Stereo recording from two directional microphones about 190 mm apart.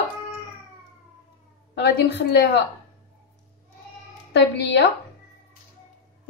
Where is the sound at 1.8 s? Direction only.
60° left (ahead or behind).